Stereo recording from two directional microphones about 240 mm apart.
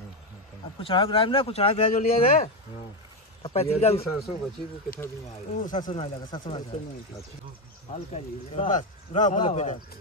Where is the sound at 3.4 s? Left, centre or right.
Left.